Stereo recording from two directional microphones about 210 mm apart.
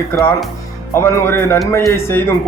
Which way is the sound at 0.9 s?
10° left (ahead or behind).